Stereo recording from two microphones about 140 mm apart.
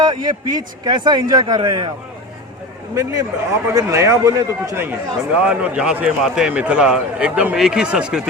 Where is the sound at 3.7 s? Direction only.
25° right (ahead or behind).